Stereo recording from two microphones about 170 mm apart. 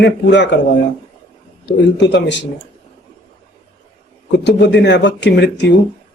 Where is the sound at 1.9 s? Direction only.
90° left.